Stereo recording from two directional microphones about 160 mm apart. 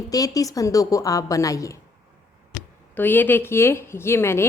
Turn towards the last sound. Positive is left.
turn(degrees=15)  # may be behind; listen again after turning